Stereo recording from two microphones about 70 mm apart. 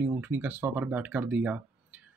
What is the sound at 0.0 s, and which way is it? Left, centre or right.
Speech, right.